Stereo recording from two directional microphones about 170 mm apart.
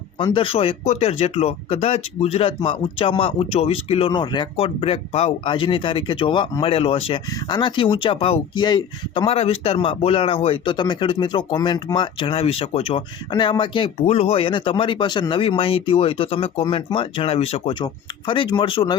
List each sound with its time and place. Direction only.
0.3 s speech: 30° left (ahead or behind)